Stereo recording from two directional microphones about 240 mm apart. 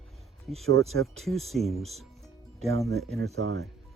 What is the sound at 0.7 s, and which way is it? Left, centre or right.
Speech, right.